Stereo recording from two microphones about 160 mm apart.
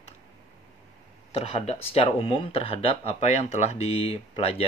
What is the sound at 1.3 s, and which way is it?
Speech, 40° left (ahead or behind).